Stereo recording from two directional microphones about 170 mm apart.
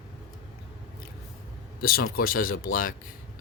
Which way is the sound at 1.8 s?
60° left (ahead or behind).